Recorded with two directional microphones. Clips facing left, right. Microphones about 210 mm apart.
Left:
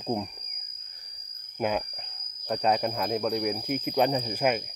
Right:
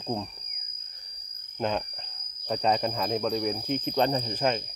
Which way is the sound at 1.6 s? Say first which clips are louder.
Left 1 dB; 10° left (ahead or behind).